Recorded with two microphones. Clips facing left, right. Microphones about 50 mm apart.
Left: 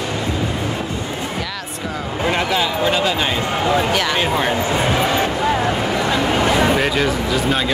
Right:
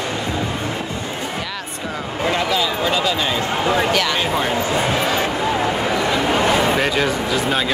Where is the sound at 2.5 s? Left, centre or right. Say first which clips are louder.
Left 1 dB; left.